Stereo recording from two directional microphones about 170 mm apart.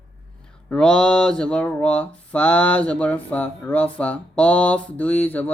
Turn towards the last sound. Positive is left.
turn(degrees=10)  # may be behind; listen again after turning